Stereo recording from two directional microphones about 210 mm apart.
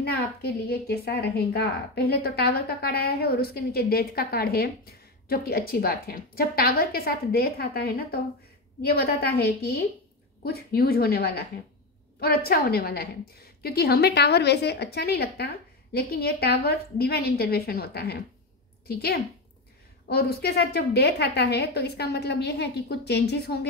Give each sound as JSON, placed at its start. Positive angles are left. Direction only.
{"t": 0.0, "sound": "a woman's voice", "side_deg": 50}